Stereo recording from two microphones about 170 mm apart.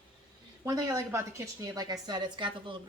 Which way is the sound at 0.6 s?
20° right (ahead or behind).